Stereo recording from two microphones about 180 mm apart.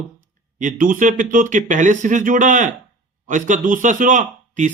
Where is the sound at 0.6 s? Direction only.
45° right (ahead or behind).